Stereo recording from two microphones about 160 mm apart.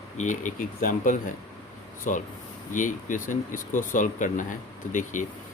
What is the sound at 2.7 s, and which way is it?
Speech, 55° left (ahead or behind).